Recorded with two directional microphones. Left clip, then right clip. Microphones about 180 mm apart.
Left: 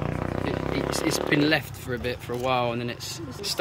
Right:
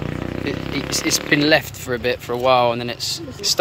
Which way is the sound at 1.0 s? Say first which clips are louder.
Right 7 dB; 15° left (ahead or behind).